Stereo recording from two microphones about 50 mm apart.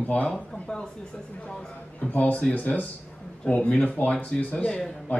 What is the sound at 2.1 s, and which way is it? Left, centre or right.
Speech, left.